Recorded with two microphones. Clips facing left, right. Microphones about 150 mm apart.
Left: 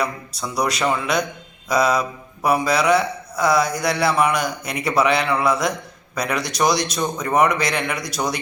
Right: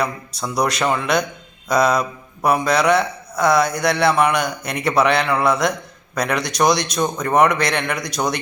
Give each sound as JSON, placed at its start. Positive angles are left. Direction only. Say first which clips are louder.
{"t": 0.0, "sound": "speech", "louder": "right 2 dB", "side_deg": 0}
{"t": 3.7, "sound": "speech", "louder": "right 2 dB", "side_deg": -55}
{"t": 3.9, "sound": "speech", "louder": "right 2 dB", "side_deg": 0}